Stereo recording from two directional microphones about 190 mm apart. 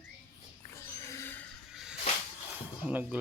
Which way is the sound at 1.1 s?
10° left (ahead or behind).